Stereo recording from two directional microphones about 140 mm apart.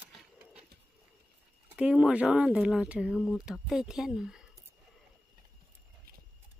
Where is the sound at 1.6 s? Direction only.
5° right (ahead or behind).